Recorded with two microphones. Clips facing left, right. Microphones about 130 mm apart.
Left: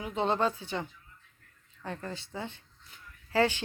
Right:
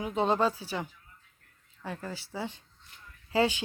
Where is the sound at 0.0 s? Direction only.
15° right (ahead or behind).